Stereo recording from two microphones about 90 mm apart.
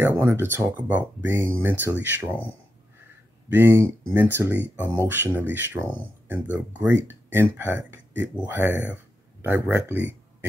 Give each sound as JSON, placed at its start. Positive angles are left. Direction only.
{"t": 0.0, "sound": "speech", "side_deg": -25}
{"t": 3.4, "sound": "speech", "side_deg": -25}